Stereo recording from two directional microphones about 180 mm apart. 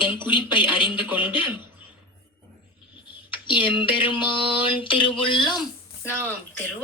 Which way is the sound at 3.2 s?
25° left (ahead or behind).